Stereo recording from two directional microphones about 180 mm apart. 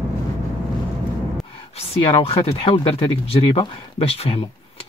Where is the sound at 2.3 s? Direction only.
35° left (ahead or behind).